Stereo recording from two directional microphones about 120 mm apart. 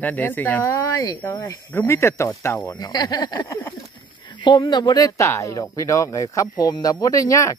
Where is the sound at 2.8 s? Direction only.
35° left (ahead or behind).